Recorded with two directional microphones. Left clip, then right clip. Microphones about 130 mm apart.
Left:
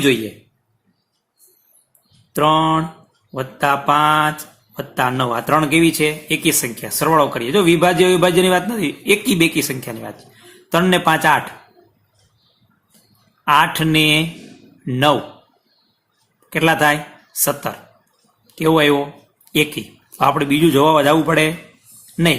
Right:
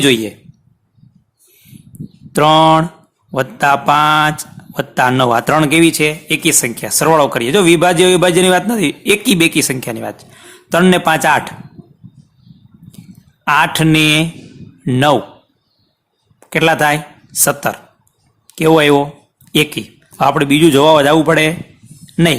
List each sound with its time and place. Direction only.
2.3 s speech: 90° right
3.3 s speech: 75° right (ahead or behind); by 11.4 s 60° right (ahead or behind)
13.4 s speech: 55° right (ahead or behind)
16.5 s speech: 55° right (ahead or behind)
22.0 s a sound: 55° right (ahead or behind)